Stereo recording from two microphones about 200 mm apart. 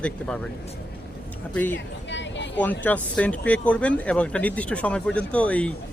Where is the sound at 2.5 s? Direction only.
10° left (ahead or behind).